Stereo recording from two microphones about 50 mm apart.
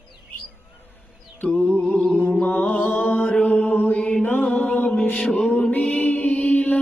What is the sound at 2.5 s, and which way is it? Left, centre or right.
Music, left.